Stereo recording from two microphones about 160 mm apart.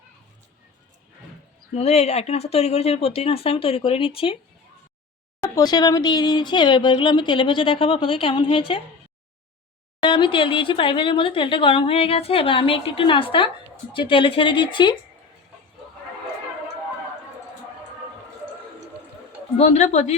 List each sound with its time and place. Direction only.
1.7 s speech: 40° left (ahead or behind)
5.5 s speech: 25° left (ahead or behind)
10.0 s speech: 30° left (ahead or behind)
19.5 s a woman's voice: 45° left (ahead or behind)